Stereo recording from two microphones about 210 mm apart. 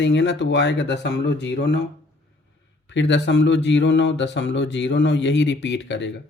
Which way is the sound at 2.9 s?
60° left (ahead or behind).